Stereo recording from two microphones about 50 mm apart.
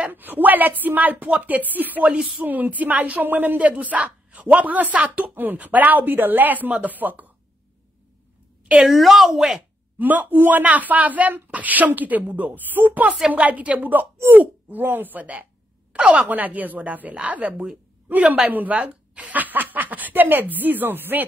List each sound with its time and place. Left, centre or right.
0.1 s speech: right
2.1 s a woman's voice: right
2.4 s speech: right
8.8 s a woman's voice: centre
9.9 s a woman's voice: right